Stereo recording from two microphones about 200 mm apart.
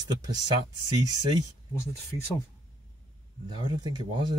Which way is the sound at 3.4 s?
25° right (ahead or behind).